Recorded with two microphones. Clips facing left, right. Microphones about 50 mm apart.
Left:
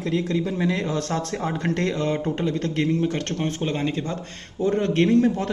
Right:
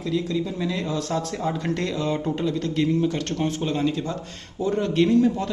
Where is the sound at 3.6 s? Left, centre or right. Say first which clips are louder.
Right 1 dB; left.